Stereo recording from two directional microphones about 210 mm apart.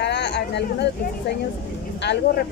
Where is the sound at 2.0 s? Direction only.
55° left (ahead or behind).